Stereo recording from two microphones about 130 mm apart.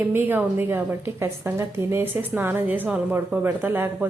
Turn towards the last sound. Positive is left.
turn(degrees=-15)  # may be behind; listen again after turning